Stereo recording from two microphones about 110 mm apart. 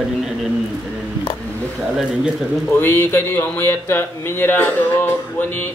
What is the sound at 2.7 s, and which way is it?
Speech, 20° left (ahead or behind).